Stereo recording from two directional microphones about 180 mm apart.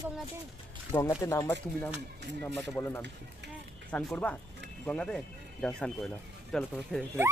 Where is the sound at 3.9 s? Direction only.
5° left (ahead or behind).